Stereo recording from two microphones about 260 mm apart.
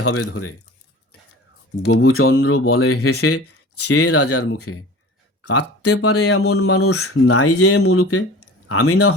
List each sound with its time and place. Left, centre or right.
0.0 s speech: left
1.9 s speech: left